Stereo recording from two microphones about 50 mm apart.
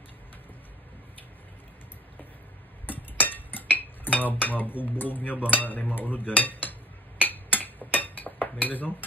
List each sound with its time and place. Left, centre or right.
2.9 s dishes: left
5.5 s a sound: left
7.2 s cutlery: left